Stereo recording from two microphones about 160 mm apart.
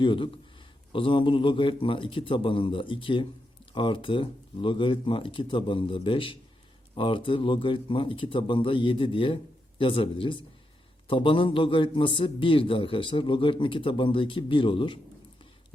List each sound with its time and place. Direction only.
0.0 s a man's voice: 30° left (ahead or behind)